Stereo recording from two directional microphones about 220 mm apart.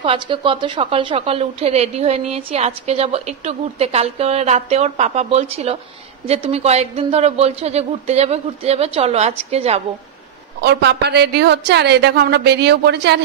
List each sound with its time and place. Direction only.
0.0 s a woman's voice: 25° right (ahead or behind)
10.6 s a woman's voice: 50° right (ahead or behind)